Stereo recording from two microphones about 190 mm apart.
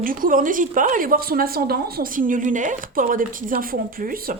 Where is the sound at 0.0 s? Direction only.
45° right (ahead or behind).